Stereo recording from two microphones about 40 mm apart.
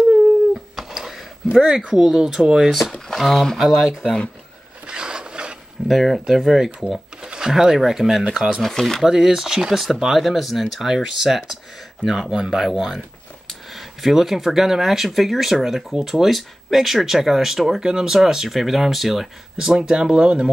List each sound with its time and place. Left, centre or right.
0.7 s a sound: centre
2.0 s speech: centre
3.2 s speech: centre
3.6 s speech: centre
4.8 s wood: right
5.9 s speech: centre
8.6 s speech: centre
9.0 s speech: centre
10.9 s speech: centre
17.8 s speech: centre